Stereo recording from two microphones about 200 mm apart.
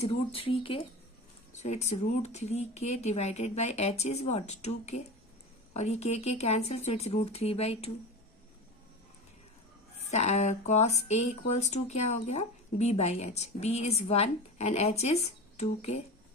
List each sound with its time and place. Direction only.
0.0 s speech: 30° left (ahead or behind)
10.1 s speech: 35° left (ahead or behind)